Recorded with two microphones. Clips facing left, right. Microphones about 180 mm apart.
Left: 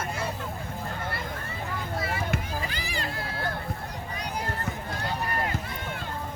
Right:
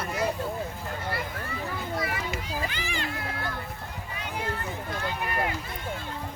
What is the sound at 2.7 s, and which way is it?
Children playing, 35° left (ahead or behind).